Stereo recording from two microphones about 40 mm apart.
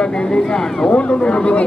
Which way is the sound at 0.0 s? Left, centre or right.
Left.